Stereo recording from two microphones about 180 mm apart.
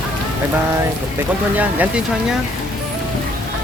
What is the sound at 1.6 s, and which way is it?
Speech, 5° right (ahead or behind).